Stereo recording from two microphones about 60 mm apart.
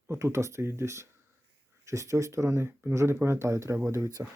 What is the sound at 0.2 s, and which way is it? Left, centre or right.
A man's voice, right.